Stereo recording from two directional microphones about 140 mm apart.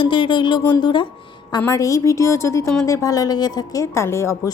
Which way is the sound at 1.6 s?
20° left (ahead or behind).